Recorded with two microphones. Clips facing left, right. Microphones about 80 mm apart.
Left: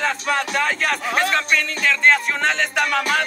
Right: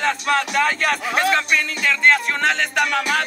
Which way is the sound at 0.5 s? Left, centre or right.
Centre.